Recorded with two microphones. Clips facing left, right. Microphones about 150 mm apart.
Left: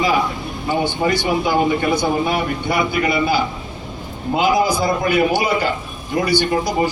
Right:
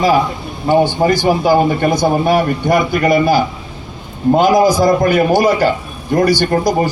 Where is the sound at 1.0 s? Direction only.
35° right (ahead or behind).